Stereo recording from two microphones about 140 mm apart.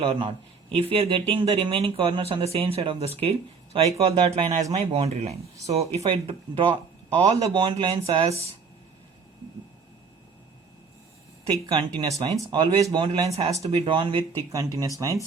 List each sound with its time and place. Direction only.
0.0 s speech: 40° right (ahead or behind)
11.6 s speech: 40° right (ahead or behind)
12.0 s speech: 25° right (ahead or behind)
13.3 s speech: 50° right (ahead or behind)
14.8 s speech: 25° right (ahead or behind)